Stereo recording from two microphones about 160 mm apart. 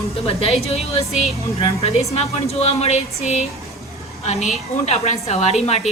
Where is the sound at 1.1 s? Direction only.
Centre (ahead or behind).